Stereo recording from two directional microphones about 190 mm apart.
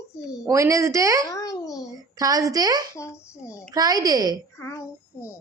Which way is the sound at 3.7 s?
20° right (ahead or behind).